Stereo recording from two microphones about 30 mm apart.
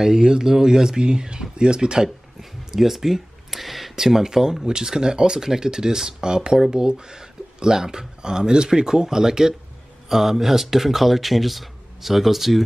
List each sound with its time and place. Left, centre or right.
0.0 s speech: centre
2.7 s a sound: centre
3.9 s speech: centre
10.0 s speech: centre